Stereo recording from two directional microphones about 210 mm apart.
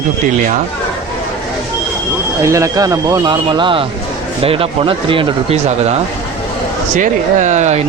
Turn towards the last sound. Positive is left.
turn(degrees=-35)  # may be behind; listen again after turning